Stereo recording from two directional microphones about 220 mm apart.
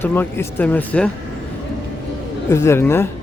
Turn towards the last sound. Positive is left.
turn(degrees=10)  # may be behind; listen again after turning